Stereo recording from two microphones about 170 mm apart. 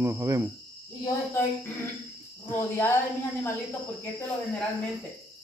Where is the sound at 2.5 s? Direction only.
15° left (ahead or behind).